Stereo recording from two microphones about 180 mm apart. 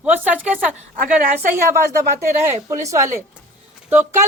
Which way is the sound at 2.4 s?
15° right (ahead or behind).